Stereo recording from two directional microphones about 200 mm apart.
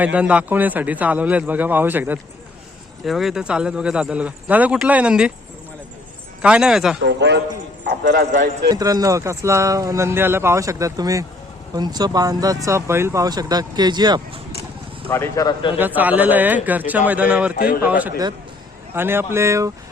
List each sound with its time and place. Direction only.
0.0 s speech: 5° right (ahead or behind)
6.4 s speech: 5° right (ahead or behind)
7.0 s a man's voice: 60° right (ahead or behind)
8.7 s speech: 20° right (ahead or behind)
15.1 s speech: 15° left (ahead or behind)
16.0 s speech: 10° right (ahead or behind)
17.5 s a man's voice: 45° left (ahead or behind)
17.8 s speech: 5° right (ahead or behind)